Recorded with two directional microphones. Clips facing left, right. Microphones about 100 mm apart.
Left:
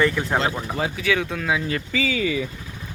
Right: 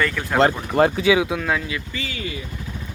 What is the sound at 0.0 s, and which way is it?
Speech, 20° left (ahead or behind).